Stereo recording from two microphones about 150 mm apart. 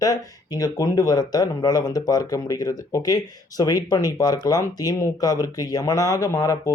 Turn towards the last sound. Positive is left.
turn(degrees=20)  # may be behind; listen again after turning